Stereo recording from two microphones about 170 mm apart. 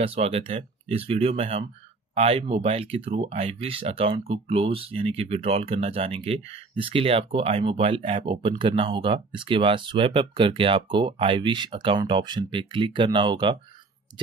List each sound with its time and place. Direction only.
0.0 s speech: 35° right (ahead or behind)